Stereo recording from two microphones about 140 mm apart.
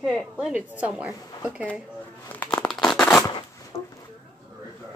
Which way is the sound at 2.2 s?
10° left (ahead or behind).